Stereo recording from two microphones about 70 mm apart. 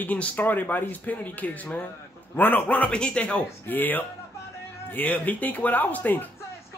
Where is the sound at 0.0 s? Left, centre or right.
Left.